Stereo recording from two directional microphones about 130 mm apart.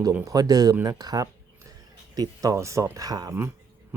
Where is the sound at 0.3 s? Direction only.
30° right (ahead or behind).